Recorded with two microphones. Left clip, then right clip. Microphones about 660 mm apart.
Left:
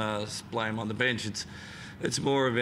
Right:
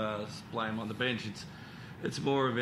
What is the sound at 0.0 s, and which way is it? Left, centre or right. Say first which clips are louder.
Speech: left 4 dB; left.